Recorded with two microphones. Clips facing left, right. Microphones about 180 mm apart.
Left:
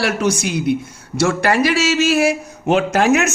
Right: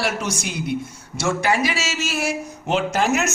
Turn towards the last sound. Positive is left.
turn(degrees=65)  # may be behind; listen again after turning